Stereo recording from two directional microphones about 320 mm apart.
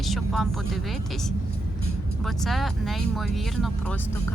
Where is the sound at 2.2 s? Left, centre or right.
Centre.